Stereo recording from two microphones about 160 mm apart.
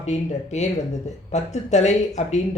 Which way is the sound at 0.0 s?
45° left (ahead or behind).